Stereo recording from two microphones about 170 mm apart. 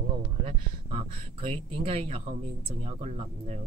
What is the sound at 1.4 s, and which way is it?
A woman's voice, 35° right (ahead or behind).